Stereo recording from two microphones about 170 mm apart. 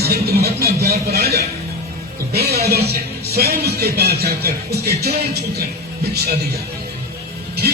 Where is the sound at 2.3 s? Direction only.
70° right (ahead or behind).